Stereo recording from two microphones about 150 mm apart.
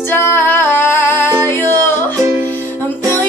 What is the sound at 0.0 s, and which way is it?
Music, 15° left (ahead or behind).